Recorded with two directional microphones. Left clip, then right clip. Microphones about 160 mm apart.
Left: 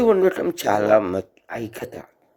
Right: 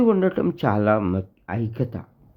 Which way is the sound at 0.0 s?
25° left (ahead or behind).